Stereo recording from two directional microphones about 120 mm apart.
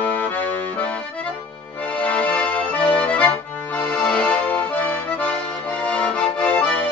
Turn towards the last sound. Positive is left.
turn(degrees=10)  # may be behind; listen again after turning